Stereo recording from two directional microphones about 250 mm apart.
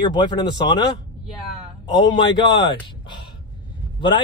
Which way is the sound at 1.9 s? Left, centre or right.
Centre.